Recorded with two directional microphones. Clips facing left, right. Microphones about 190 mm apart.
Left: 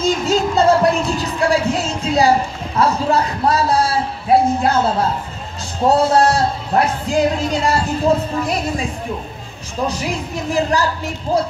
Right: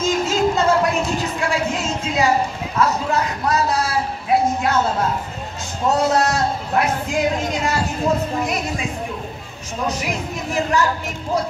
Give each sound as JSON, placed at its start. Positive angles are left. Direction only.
{"t": 0.0, "sound": "music", "side_deg": 35}
{"t": 2.8, "sound": "speech", "side_deg": 30}
{"t": 5.9, "sound": "music", "side_deg": 30}
{"t": 9.8, "sound": "music", "side_deg": 30}